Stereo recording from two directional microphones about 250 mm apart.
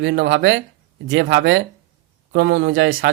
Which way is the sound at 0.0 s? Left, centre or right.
Right.